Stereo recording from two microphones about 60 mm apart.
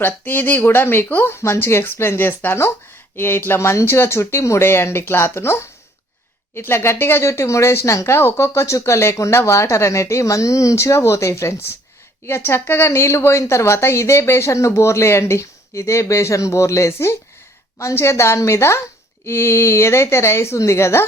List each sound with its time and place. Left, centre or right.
0.0 s speech: left
3.6 s speech: left